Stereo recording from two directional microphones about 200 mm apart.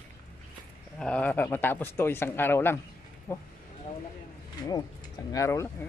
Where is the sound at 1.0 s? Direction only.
5° left (ahead or behind).